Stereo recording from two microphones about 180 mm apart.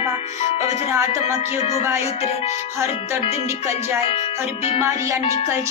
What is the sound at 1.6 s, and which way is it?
Speech, 35° left (ahead or behind).